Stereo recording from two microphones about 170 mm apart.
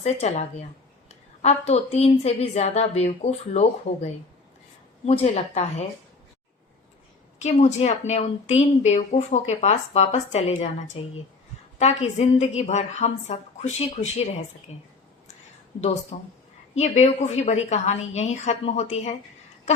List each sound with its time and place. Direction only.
0.0 s a woman's voice: 40° left (ahead or behind)
7.3 s a woman's voice: 40° left (ahead or behind)
16.1 s a woman's voice: 40° left (ahead or behind)